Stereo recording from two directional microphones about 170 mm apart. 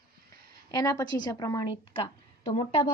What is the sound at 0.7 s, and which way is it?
A woman's voice, 20° left (ahead or behind).